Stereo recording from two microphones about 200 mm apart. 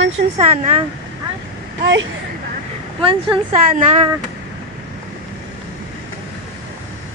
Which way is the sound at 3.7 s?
35° right (ahead or behind).